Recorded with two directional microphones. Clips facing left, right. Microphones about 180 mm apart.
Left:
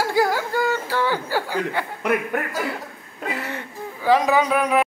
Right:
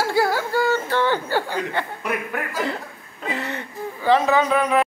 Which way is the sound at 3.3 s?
10° left (ahead or behind).